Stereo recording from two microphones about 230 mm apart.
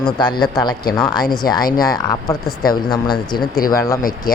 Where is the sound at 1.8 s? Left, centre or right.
Centre.